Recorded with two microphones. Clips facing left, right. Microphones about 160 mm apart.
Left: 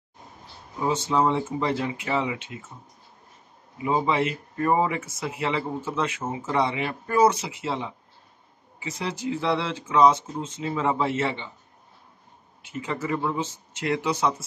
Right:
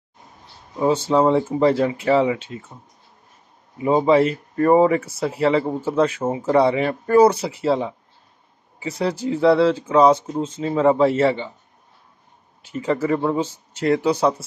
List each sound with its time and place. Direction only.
0.8 s speech: 30° right (ahead or behind)
3.7 s speech: 35° right (ahead or behind)
12.6 s speech: 35° right (ahead or behind)